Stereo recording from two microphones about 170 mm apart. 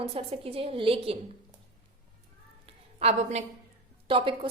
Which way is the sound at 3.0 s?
35° right (ahead or behind).